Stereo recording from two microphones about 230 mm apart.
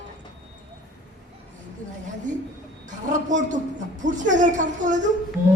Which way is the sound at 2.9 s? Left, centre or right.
Right.